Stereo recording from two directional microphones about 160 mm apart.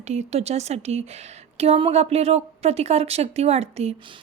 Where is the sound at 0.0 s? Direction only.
45° right (ahead or behind).